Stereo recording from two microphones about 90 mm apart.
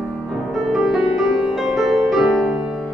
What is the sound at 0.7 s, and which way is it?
Music, 5° right (ahead or behind).